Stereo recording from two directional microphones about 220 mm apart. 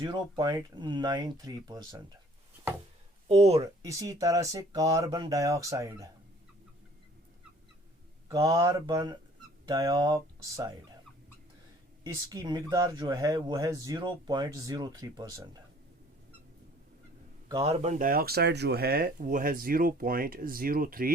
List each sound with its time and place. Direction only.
0.0 s speech: 20° right (ahead or behind)
3.2 s speech: 30° right (ahead or behind)
3.8 s speech: 15° right (ahead or behind)
8.3 s speech: 15° right (ahead or behind)
12.0 s speech: 15° right (ahead or behind)
17.5 s speech: 25° right (ahead or behind)